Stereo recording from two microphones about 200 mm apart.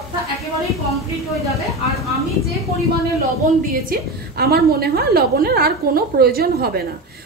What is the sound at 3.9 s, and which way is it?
A woman's voice, 50° right (ahead or behind).